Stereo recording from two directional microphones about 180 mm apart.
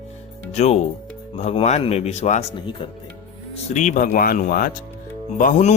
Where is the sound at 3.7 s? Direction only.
40° left (ahead or behind).